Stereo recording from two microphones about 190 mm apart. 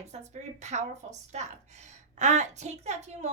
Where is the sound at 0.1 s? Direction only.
35° right (ahead or behind).